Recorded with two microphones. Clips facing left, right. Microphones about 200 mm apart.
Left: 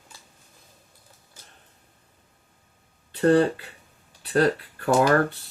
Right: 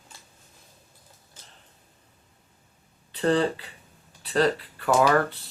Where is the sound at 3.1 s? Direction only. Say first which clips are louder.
Left 4 dB; 50° left (ahead or behind).